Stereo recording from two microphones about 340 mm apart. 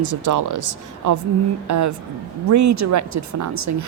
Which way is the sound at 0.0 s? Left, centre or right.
Right.